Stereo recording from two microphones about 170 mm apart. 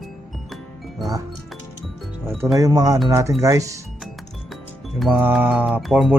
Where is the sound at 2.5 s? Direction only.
20° right (ahead or behind).